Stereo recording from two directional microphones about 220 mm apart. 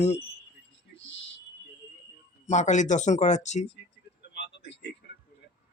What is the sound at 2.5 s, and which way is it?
Speech, 35° left (ahead or behind).